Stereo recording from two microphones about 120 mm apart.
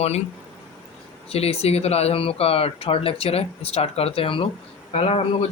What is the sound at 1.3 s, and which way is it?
A man's voice, 60° left (ahead or behind).